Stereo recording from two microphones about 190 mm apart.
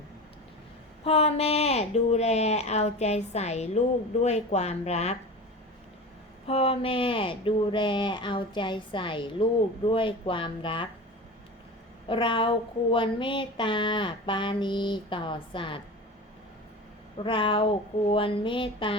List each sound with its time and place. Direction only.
1.0 s speech: 30° left (ahead or behind)
6.5 s speech: 30° left (ahead or behind)
12.0 s speech: 25° left (ahead or behind)
17.2 s speech: 25° left (ahead or behind)